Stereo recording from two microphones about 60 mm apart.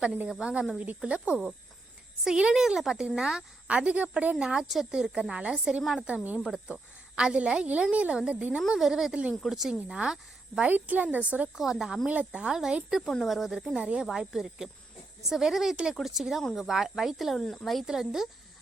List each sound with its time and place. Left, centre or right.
0.3 s a woman's voice: centre
4.4 s a woman's voice: centre
8.7 s a woman's voice: centre
10.7 s a woman's voice: right
11.5 s a woman's voice: centre
12.0 s a woman's voice: right; by 13.7 s centre
13.7 s a woman's voice: centre
17.8 s a woman's voice: centre